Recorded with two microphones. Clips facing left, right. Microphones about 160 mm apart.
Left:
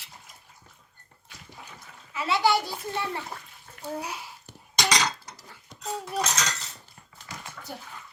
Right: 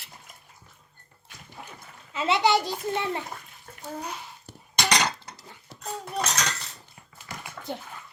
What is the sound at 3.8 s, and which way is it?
Speech, 10° left (ahead or behind).